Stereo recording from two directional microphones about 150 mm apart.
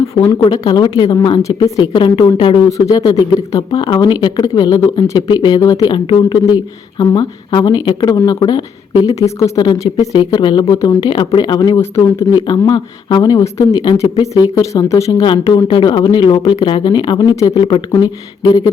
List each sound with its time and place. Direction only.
0.1 s speech: 25° left (ahead or behind)
2.6 s speech: 20° left (ahead or behind)
15.3 s speech: 35° left (ahead or behind)